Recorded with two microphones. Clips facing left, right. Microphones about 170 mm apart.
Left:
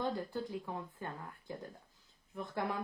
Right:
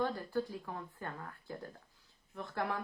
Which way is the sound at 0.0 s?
20° left (ahead or behind).